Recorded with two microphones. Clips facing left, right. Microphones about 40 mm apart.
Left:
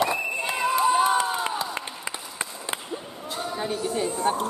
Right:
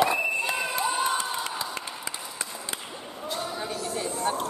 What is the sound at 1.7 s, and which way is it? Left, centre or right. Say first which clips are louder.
Run: left 2 dB; left.